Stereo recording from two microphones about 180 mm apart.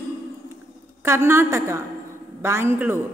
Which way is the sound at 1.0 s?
15° right (ahead or behind).